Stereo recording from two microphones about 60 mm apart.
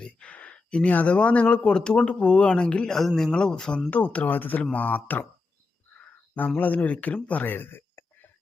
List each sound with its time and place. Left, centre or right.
0.0 s speech: left
3.8 s speech: left
6.0 s a sound: left
6.6 s speech: left